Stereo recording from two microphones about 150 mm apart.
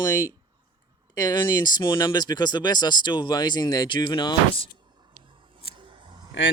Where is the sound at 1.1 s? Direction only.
25° left (ahead or behind).